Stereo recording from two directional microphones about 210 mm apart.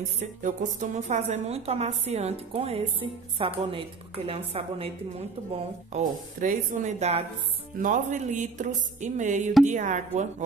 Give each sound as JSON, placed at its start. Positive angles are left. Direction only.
{"t": 0.4, "sound": "a woman's voice", "side_deg": -35}
{"t": 5.9, "sound": "a woman's voice", "side_deg": -35}